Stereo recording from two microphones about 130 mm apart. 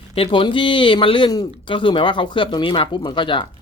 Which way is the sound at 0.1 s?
45° left (ahead or behind).